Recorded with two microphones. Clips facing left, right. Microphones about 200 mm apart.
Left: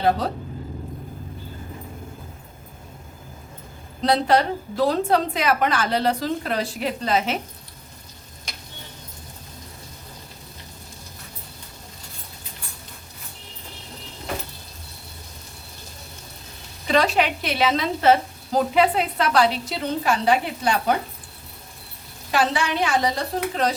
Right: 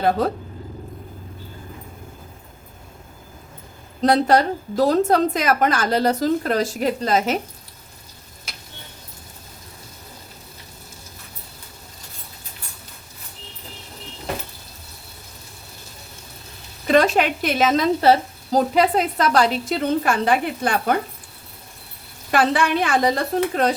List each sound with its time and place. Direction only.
4.0 s a woman's voice: 45° right (ahead or behind)
8.5 s tick-tock: 5° right (ahead or behind)
16.9 s a woman's voice: 50° right (ahead or behind)
22.3 s a woman's voice: 55° right (ahead or behind)